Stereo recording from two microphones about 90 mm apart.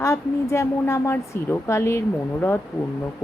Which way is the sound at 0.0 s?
30° left (ahead or behind).